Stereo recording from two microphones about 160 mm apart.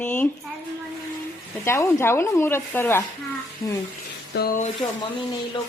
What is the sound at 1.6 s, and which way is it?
A woman's voice, 15° left (ahead or behind).